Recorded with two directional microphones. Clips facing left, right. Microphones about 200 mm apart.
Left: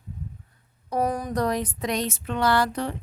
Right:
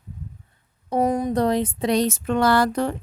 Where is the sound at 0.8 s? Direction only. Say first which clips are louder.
Right 5 dB; 25° right (ahead or behind).